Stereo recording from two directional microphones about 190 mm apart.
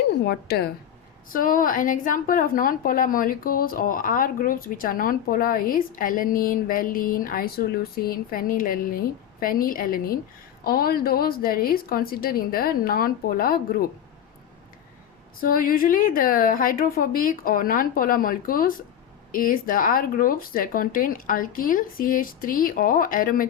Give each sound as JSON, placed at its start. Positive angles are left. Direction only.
{"t": 0.3, "sound": "a woman's voice", "side_deg": 55}
{"t": 1.3, "sound": "a woman's voice", "side_deg": 45}
{"t": 15.4, "sound": "a woman's voice", "side_deg": 50}